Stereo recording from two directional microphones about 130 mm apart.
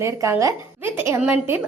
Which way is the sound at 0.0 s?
20° right (ahead or behind).